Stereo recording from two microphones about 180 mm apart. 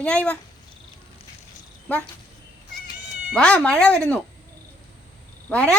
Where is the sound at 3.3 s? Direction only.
5° left (ahead or behind).